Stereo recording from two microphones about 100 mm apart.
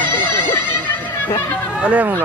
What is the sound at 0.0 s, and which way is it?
Music, 20° left (ahead or behind).